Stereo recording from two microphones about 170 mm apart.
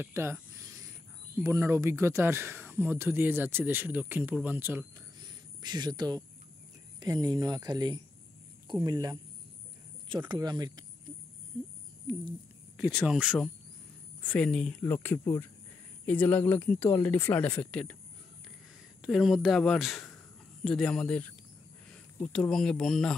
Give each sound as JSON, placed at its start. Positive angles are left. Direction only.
{"t": 0.0, "sound": "a sound", "side_deg": -15}
{"t": 1.5, "sound": "speech", "side_deg": -15}
{"t": 5.2, "sound": "a sound", "side_deg": -25}
{"t": 7.0, "sound": "speech", "side_deg": -25}
{"t": 12.7, "sound": "speech", "side_deg": 0}
{"t": 14.2, "sound": "speech", "side_deg": 5}
{"t": 19.0, "sound": "speech", "side_deg": 0}
{"t": 22.3, "sound": "speech", "side_deg": 5}